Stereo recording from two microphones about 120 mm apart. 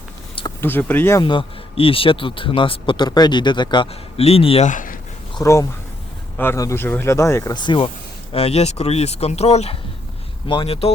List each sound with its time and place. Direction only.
0.6 s speech: 15° left (ahead or behind)
1.2 s speech: 45° left (ahead or behind)
4.2 s speech: 55° left (ahead or behind)
4.6 s speech: 90° left
5.4 s speech: 25° left (ahead or behind)
7.5 s speech: 40° left (ahead or behind)
8.3 s speech: 55° left (ahead or behind)
10.4 s speech: 45° left (ahead or behind)